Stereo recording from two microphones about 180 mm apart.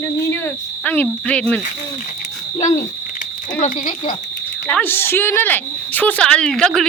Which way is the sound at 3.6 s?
45° left (ahead or behind).